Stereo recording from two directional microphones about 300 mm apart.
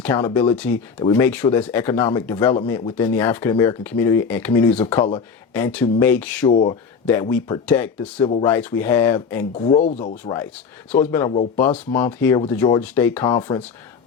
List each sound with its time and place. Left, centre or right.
0.0 s speech: centre
4.7 s speech: left; by 8.1 s centre
8.2 s speech: centre
8.4 s speech: centre
9.6 s speech: left
13.2 s speech: centre